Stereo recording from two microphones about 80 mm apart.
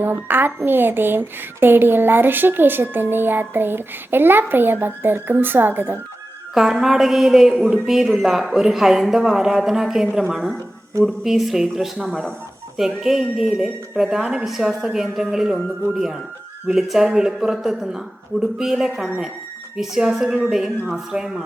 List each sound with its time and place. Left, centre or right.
0.0 s speech: right
6.5 s a woman's voice: centre